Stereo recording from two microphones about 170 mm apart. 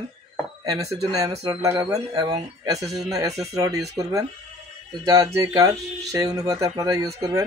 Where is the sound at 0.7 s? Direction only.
20° right (ahead or behind).